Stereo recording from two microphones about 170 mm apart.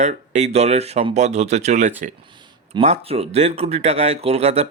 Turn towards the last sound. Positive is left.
turn(degrees=-40)  # may be behind; listen again after turning